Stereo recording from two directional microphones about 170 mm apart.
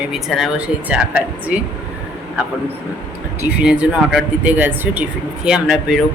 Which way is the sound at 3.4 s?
10° right (ahead or behind).